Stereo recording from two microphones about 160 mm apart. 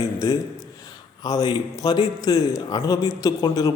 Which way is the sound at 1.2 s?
25° left (ahead or behind).